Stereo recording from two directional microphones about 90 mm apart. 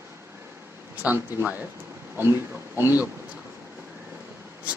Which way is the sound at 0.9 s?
20° right (ahead or behind).